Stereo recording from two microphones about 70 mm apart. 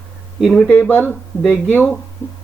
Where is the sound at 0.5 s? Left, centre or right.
Centre.